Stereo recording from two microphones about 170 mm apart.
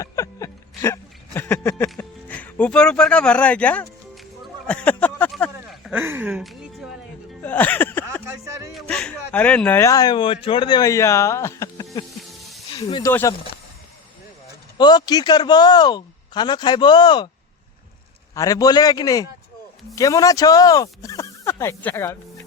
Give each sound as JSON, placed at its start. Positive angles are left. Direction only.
{"t": 0.0, "sound": "a sound", "side_deg": 20}
{"t": 7.4, "sound": "a sound", "side_deg": 10}
{"t": 8.7, "sound": "speech", "side_deg": 5}
{"t": 13.1, "sound": "speech", "side_deg": 15}
{"t": 14.8, "sound": "speech", "side_deg": 25}
{"t": 18.3, "sound": "speech", "side_deg": 20}